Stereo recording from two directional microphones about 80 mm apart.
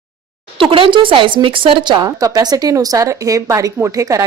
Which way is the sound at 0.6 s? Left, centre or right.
Right.